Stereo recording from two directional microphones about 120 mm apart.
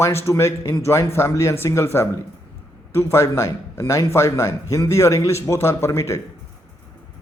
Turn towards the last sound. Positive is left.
turn(degrees=20)  # may be behind; listen again after turning